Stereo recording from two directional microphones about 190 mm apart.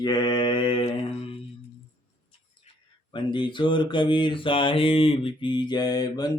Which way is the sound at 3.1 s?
25° left (ahead or behind).